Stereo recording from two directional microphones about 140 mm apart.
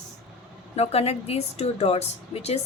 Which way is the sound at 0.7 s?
50° left (ahead or behind).